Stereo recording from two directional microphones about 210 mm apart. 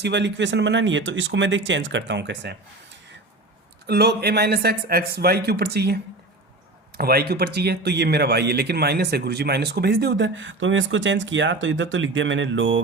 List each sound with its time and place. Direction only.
0.0 s speech: 55° right (ahead or behind)
3.8 s a man's voice: 50° right (ahead or behind)